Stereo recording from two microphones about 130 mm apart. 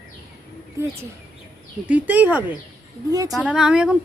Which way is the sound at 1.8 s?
10° right (ahead or behind).